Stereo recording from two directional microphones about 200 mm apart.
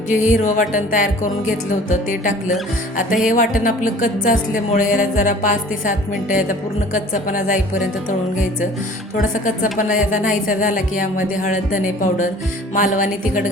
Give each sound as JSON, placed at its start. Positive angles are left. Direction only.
{"t": 0.1, "sound": "a woman's voice", "side_deg": 35}
{"t": 9.1, "sound": "a woman's voice", "side_deg": 40}